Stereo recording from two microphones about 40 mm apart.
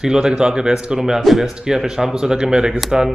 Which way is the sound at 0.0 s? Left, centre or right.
Centre.